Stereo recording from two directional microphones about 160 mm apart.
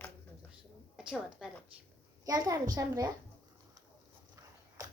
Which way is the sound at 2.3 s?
20° right (ahead or behind).